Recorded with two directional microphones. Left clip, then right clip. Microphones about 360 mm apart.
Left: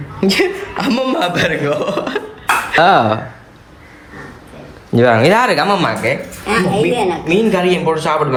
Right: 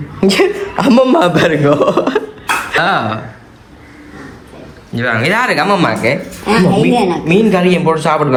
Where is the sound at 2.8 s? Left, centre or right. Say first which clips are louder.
Left 5 dB; centre.